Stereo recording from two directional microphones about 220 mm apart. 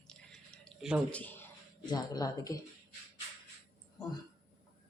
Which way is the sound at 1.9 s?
20° left (ahead or behind).